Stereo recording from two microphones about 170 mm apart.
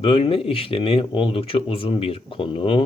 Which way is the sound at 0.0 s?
35° left (ahead or behind).